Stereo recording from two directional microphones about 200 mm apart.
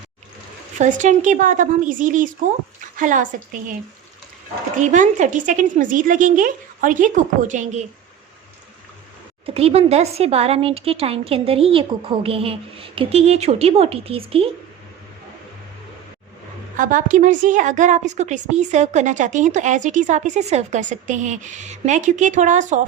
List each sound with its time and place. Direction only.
0.8 s a woman's voice: 40° right (ahead or behind)
4.8 s a woman's voice: 40° right (ahead or behind)
9.6 s a woman's voice: 30° right (ahead or behind)
16.7 s a woman's voice: 40° right (ahead or behind)